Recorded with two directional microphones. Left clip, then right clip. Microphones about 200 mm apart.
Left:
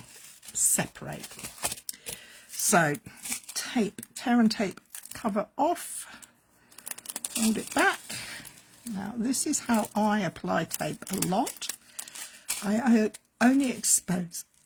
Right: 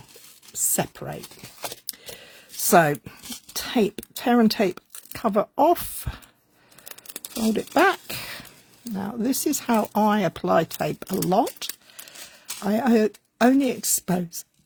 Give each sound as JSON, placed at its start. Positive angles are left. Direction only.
{"t": 0.8, "sound": "speech", "side_deg": -50}
{"t": 1.9, "sound": "a sound", "side_deg": -55}
{"t": 2.6, "sound": "speech", "side_deg": -55}
{"t": 7.1, "sound": "crumpling", "side_deg": 10}
{"t": 7.5, "sound": "a sound", "side_deg": -55}
{"t": 9.0, "sound": "speech", "side_deg": -55}